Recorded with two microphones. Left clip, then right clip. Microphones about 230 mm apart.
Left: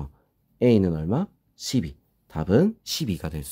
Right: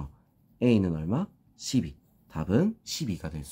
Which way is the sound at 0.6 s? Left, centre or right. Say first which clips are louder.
Left 6 dB; left.